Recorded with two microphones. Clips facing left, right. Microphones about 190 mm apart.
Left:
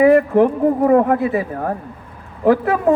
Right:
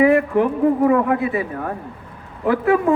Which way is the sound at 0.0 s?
40° left (ahead or behind).